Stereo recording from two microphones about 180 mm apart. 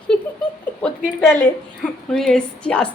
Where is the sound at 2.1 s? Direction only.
5° left (ahead or behind).